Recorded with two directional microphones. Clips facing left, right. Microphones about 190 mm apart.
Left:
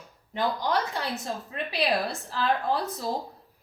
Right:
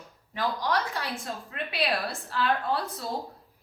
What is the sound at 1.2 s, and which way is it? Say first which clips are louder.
A woman's voice: left 2 dB; 25° left (ahead or behind).